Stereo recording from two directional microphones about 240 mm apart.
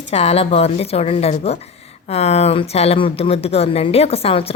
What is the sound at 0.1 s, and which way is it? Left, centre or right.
Speech, left.